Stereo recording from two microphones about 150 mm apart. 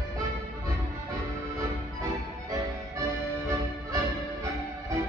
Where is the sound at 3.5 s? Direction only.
20° right (ahead or behind).